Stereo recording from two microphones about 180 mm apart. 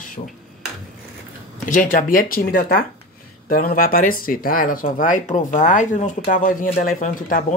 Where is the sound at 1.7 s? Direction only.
50° left (ahead or behind).